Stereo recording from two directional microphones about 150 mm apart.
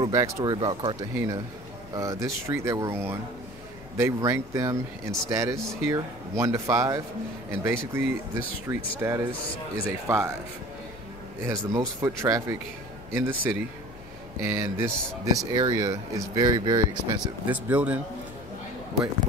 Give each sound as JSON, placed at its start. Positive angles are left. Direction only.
{"t": 0.0, "sound": "speech", "side_deg": -25}
{"t": 1.1, "sound": "speech", "side_deg": -20}
{"t": 9.4, "sound": "speech", "side_deg": 35}
{"t": 10.0, "sound": "speech", "side_deg": -20}
{"t": 11.4, "sound": "speech", "side_deg": -20}
{"t": 17.5, "sound": "speech", "side_deg": -10}